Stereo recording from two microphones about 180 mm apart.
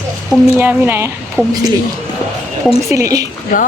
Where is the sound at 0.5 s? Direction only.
10° right (ahead or behind).